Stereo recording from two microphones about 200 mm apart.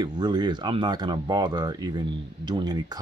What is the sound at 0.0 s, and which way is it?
A man's voice, 20° right (ahead or behind).